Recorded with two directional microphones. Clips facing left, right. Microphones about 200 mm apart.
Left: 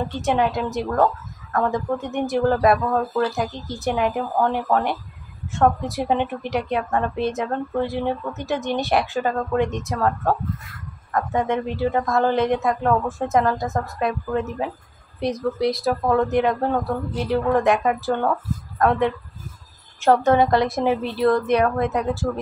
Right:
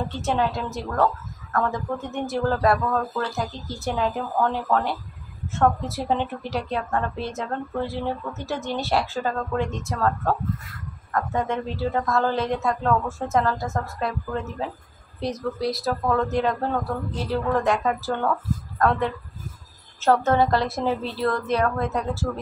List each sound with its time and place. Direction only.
0.2 s a woman's voice: 15° left (ahead or behind)